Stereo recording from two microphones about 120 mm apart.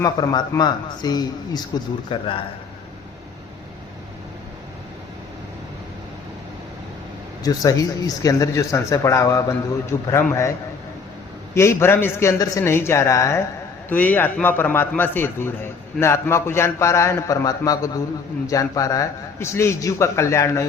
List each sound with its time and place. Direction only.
0.0 s speech: 30° left (ahead or behind)
7.4 s speech: 30° left (ahead or behind)
11.5 s speech: 20° left (ahead or behind)
13.9 s a man's voice: 15° left (ahead or behind)